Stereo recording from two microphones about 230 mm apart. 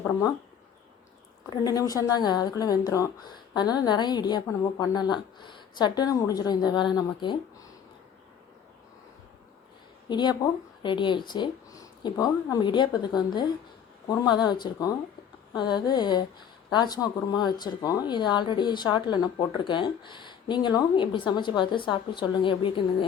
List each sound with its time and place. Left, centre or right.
1.5 s a woman's voice: centre
10.1 s speech: centre